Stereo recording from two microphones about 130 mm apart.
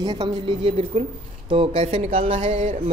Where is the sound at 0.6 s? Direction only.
50° right (ahead or behind).